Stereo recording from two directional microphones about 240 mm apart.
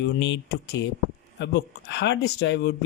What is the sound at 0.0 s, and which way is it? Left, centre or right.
Speech, left.